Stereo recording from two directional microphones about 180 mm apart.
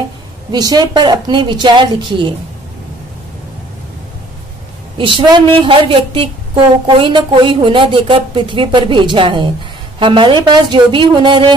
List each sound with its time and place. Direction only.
0.5 s a woman's voice: 20° right (ahead or behind)
4.9 s a woman's voice: 25° right (ahead or behind)